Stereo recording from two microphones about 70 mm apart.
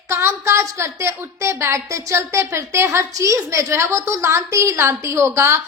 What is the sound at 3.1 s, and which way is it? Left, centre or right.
A woman's voice, right.